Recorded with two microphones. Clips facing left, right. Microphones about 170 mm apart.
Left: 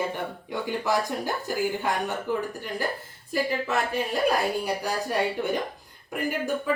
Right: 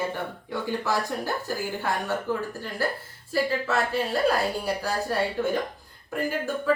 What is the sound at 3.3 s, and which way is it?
Speech, 15° left (ahead or behind).